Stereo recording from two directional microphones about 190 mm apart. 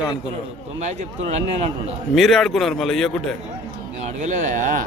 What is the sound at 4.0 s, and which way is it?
Speech, 40° right (ahead or behind).